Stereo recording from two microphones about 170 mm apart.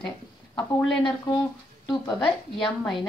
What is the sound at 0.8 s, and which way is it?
Speech, centre (ahead or behind).